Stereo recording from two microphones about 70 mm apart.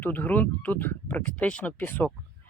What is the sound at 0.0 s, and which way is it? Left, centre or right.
Speech, left.